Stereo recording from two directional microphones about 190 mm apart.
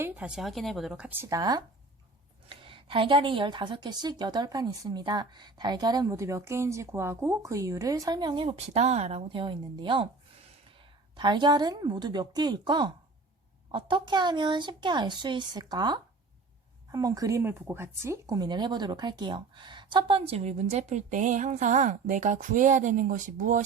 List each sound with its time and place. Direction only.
0.0 s a woman's voice: 5° right (ahead or behind); by 10.1 s 25° right (ahead or behind)
11.2 s a woman's voice: 25° right (ahead or behind); by 23.6 s 40° right (ahead or behind)